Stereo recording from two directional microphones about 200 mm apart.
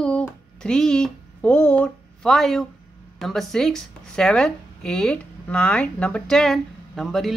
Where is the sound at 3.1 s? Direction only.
Centre (ahead or behind).